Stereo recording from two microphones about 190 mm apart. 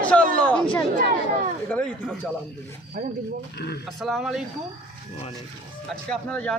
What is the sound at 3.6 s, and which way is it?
Speech, 60° left (ahead or behind).